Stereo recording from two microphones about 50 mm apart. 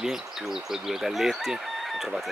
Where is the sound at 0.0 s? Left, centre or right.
Centre.